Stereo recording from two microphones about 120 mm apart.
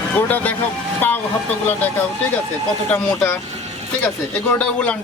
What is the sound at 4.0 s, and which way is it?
Speech, 15° left (ahead or behind).